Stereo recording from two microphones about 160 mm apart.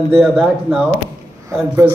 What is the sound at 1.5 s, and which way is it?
Speech, 20° right (ahead or behind).